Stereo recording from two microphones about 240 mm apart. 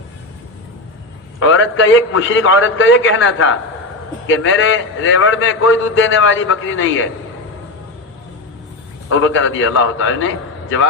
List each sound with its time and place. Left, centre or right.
1.4 s a man's voice: left
9.0 s a man's voice: left